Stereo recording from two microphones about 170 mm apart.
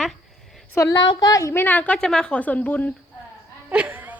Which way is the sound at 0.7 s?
15° left (ahead or behind).